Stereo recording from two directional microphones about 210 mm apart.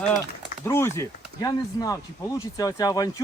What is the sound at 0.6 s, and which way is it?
Speech, 10° left (ahead or behind).